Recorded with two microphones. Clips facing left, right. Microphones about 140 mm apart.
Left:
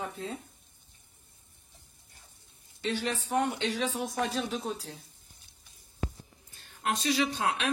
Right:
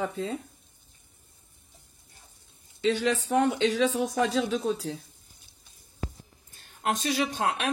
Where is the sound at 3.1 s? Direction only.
80° right.